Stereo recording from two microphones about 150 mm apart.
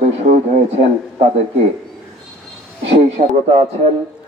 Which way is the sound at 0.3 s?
50° right (ahead or behind).